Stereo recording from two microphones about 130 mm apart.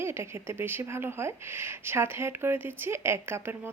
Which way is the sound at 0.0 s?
20° right (ahead or behind).